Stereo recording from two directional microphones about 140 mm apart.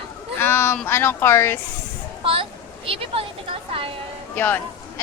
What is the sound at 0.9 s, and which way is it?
Speech, 15° left (ahead or behind).